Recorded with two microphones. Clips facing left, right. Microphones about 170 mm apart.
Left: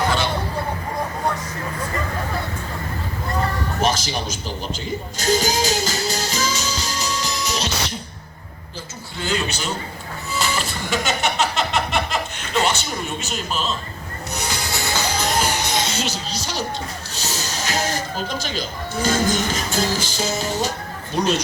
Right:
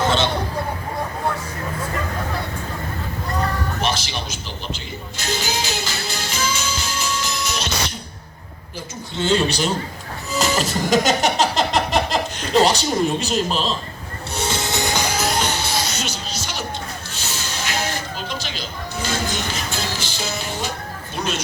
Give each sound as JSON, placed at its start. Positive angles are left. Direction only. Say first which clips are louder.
{"t": 3.8, "sound": "a man's voice", "louder": "left 3 dB", "side_deg": 40}
{"t": 5.2, "sound": "music", "louder": "left 6 dB", "side_deg": 45}
{"t": 9.1, "sound": "a man's voice", "louder": "right 6 dB", "side_deg": -30}
{"t": 10.3, "sound": "a sound", "louder": "right 5 dB", "side_deg": -40}
{"t": 14.3, "sound": "music", "louder": "right 4 dB", "side_deg": -25}
{"t": 15.4, "sound": "music", "louder": "left 1 dB", "side_deg": 10}
{"t": 21.2, "sound": "speech", "louder": "left 5 dB", "side_deg": 35}